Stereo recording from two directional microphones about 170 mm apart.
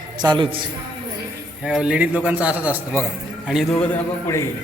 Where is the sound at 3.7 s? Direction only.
5° left (ahead or behind).